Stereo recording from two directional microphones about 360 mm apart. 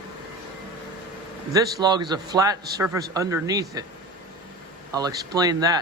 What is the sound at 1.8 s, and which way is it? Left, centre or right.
Speech, centre.